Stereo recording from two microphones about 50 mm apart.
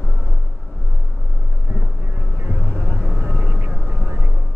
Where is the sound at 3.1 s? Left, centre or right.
Right.